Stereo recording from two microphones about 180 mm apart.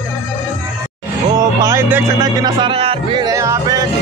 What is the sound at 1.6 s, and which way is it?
Music, 20° right (ahead or behind).